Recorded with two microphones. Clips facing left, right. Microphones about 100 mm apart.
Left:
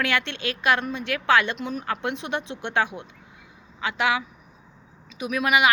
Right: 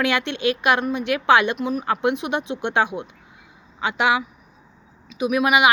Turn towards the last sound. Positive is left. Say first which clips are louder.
# right 4 dB
turn(degrees=-15)  # may be behind; listen again after turning